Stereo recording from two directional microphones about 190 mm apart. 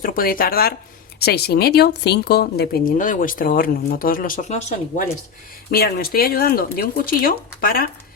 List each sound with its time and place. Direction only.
0.0 s speech: 50° left (ahead or behind)
5.7 s speech: 50° left (ahead or behind)